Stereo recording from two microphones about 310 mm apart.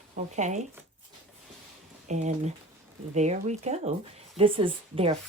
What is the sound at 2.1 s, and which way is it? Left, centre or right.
Speech, right.